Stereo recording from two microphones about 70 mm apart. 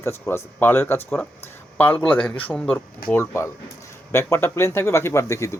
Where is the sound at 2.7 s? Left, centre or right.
Left.